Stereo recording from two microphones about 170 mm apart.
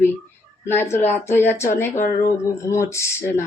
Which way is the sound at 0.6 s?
15° left (ahead or behind).